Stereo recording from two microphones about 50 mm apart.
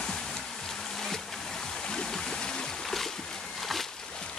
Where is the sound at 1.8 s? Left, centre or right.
Centre.